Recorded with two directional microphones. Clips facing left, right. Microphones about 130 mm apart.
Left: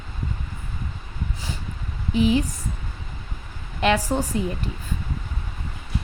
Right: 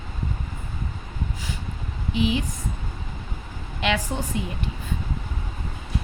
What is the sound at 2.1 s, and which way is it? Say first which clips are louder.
Speech: left 4 dB; 40° left (ahead or behind).